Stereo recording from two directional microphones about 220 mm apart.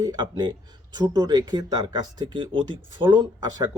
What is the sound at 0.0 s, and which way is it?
Speech, 15° right (ahead or behind).